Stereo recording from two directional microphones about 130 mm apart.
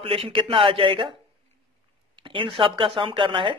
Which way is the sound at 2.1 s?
40° right (ahead or behind).